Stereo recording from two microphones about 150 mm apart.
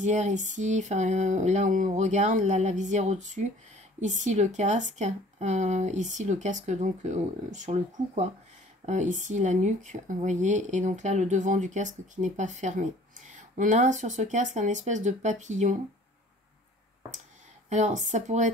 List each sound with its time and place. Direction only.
0.0 s speech: 55° right (ahead or behind)
17.6 s speech: 55° right (ahead or behind)